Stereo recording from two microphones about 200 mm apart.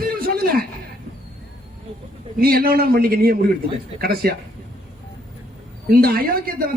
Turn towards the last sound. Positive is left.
turn(degrees=-50)  # may be behind; listen again after turning